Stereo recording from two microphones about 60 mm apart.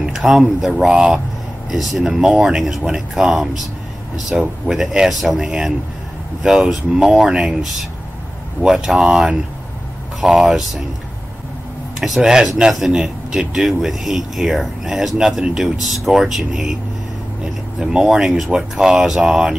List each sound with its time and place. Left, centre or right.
0.0 s speech: centre
8.6 s speech: centre
12.0 s speech: centre